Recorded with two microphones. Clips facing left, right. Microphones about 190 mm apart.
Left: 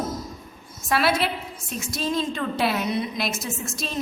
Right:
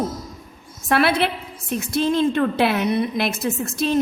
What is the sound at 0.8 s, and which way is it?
A woman's voice, 60° right (ahead or behind).